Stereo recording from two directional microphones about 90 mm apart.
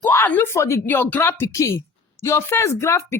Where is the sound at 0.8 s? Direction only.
20° left (ahead or behind).